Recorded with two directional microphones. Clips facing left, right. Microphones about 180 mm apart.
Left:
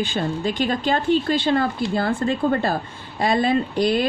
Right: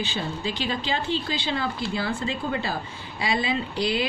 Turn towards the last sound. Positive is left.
turn(degrees=50)  # may be behind; listen again after turning